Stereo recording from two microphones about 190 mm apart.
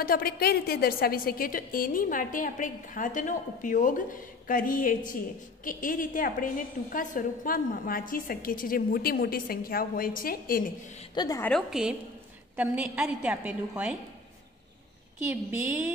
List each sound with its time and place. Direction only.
0.0 s a woman's voice: 50° left (ahead or behind)
11.1 s a woman's voice: 15° left (ahead or behind)
11.5 s a woman's voice: 5° right (ahead or behind)